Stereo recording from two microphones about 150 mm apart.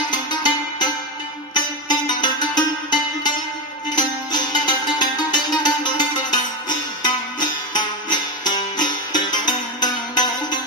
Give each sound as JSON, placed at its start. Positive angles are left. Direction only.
{"t": 0.1, "sound": "music", "side_deg": 30}